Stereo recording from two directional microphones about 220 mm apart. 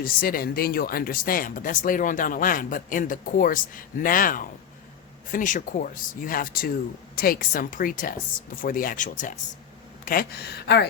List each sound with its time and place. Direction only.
0.0 s speech: 40° left (ahead or behind)